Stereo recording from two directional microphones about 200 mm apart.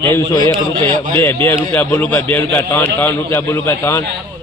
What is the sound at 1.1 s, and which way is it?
A man's voice, 10° left (ahead or behind).